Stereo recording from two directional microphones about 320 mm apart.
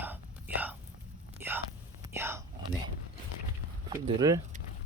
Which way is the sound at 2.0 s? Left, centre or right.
Centre.